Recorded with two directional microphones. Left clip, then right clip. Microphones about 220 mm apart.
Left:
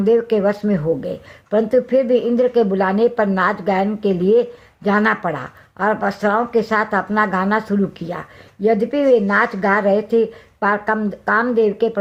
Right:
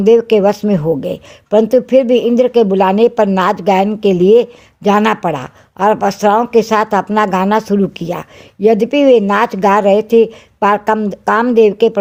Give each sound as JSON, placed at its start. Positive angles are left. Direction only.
{"t": 0.0, "sound": "speech", "side_deg": -50}